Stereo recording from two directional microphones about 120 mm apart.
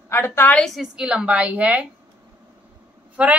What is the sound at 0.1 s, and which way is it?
Speech, 20° left (ahead or behind).